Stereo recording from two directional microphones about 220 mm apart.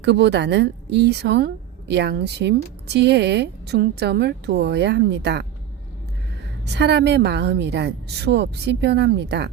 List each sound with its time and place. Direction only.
0.0 s a woman's voice: 50° right (ahead or behind)
6.7 s a woman's voice: 50° right (ahead or behind)